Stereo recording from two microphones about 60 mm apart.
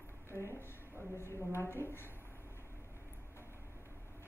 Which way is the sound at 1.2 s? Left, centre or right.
Left.